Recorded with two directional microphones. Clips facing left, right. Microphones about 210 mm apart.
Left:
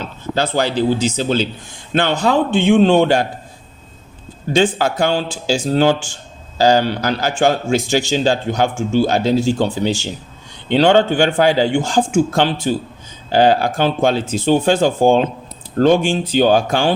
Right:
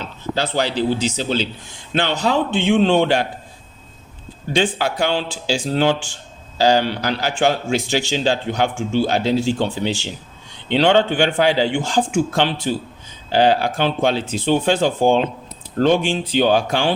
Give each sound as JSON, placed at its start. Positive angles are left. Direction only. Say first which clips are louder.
{"t": 0.0, "sound": "a man's voice", "louder": "left 3 dB", "side_deg": 50}
{"t": 4.5, "sound": "a man's voice", "louder": "left 4 dB", "side_deg": 45}